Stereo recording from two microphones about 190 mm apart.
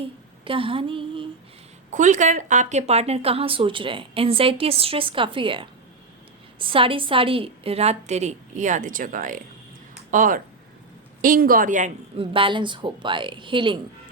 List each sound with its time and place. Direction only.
0.4 s a woman's voice: 30° right (ahead or behind)
1.9 s a woman's voice: 40° right (ahead or behind)
12.1 s a woman's voice: 30° right (ahead or behind)